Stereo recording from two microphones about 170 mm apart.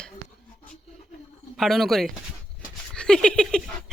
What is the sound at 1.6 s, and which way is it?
Speech, centre (ahead or behind).